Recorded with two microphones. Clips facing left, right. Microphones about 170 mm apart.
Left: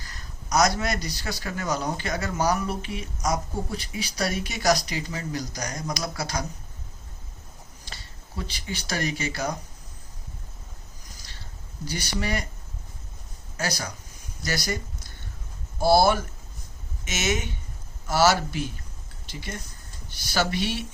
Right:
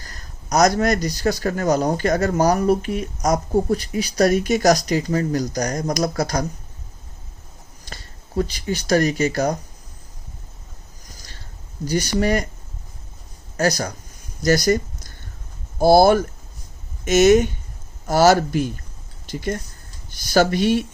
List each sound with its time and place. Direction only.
0.0 s a man's voice: 45° right (ahead or behind)
8.4 s a man's voice: 45° right (ahead or behind)
11.9 s a man's voice: 45° right (ahead or behind)
13.6 s a man's voice: 45° right (ahead or behind)